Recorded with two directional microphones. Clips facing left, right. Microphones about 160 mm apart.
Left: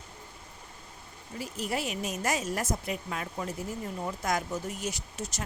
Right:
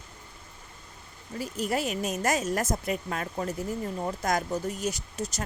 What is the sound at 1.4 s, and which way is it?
Speech, 45° right (ahead or behind).